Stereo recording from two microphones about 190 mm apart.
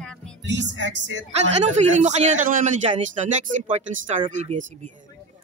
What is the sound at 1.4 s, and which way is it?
A man's voice, 35° right (ahead or behind).